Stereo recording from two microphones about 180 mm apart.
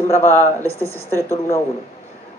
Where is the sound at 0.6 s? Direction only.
15° right (ahead or behind).